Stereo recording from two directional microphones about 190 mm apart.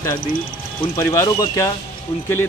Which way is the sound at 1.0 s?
15° left (ahead or behind).